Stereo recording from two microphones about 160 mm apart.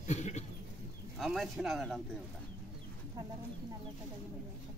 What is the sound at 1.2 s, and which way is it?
Speech, centre (ahead or behind).